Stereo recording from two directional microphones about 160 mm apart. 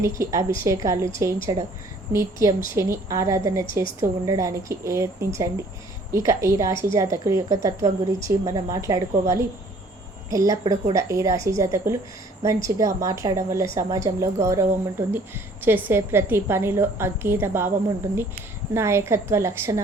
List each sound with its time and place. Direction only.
0.2 s a woman's voice: 20° right (ahead or behind)